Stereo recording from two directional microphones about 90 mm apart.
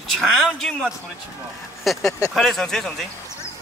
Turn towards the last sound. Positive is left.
turn(degrees=5)  # may be behind; listen again after turning